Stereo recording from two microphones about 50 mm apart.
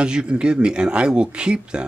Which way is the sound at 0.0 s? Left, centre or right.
Centre.